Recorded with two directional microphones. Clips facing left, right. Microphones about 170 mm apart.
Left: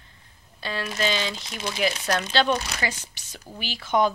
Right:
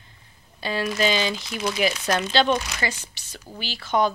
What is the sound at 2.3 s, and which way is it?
Speech, centre (ahead or behind).